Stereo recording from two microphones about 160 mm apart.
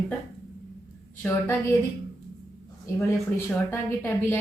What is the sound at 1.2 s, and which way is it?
Speech, 10° left (ahead or behind).